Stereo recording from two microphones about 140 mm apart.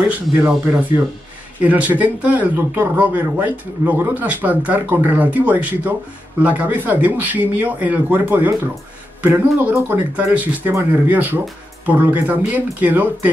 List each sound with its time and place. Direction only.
0.1 s a man's voice: 20° right (ahead or behind)